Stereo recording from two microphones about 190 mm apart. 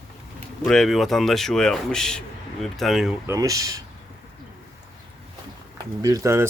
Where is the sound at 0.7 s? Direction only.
Centre (ahead or behind).